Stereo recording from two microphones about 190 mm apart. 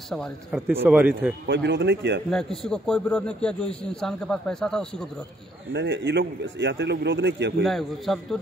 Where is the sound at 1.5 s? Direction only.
65° right (ahead or behind).